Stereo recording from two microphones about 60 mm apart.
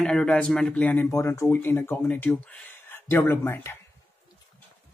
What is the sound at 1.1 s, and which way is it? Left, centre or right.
Speech, left.